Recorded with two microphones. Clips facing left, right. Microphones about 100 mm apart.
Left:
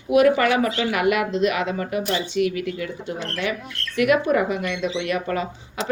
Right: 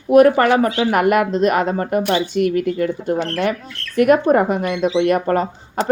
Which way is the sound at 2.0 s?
55° right (ahead or behind).